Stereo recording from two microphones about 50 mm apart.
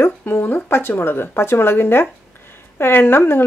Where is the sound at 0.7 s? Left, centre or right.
Left.